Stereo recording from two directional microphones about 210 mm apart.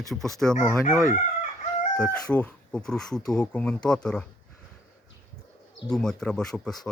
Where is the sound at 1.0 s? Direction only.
35° left (ahead or behind).